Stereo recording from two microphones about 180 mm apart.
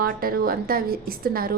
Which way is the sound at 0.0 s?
55° right (ahead or behind).